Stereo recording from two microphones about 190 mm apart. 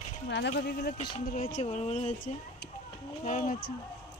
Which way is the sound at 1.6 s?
35° left (ahead or behind).